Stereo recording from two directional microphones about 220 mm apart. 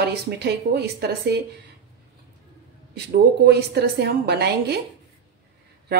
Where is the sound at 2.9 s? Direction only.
50° right (ahead or behind).